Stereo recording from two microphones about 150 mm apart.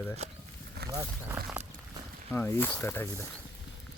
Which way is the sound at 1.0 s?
15° right (ahead or behind).